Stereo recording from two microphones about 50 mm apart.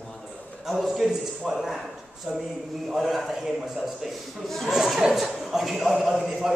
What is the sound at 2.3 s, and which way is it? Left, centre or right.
Speech, centre.